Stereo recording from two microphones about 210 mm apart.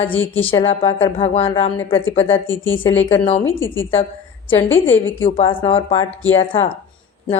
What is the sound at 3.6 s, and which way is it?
A woman's voice, 65° left (ahead or behind).